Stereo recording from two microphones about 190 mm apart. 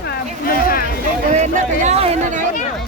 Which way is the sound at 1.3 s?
35° right (ahead or behind).